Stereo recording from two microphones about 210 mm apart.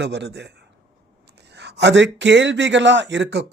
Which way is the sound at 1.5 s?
55° right (ahead or behind).